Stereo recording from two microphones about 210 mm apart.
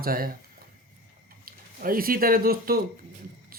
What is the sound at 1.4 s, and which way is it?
Speech, 45° right (ahead or behind).